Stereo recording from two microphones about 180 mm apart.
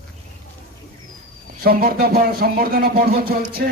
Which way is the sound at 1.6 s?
55° right (ahead or behind).